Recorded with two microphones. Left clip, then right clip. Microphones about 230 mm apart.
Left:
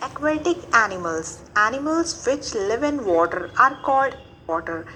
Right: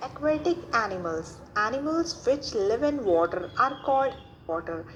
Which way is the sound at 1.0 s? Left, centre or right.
Left.